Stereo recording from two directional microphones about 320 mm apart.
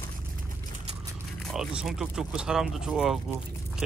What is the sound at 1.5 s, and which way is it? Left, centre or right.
Speech, centre.